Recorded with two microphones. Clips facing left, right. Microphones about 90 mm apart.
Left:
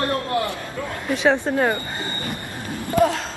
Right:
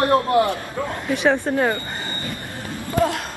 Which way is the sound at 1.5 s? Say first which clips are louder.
Even; centre (ahead or behind).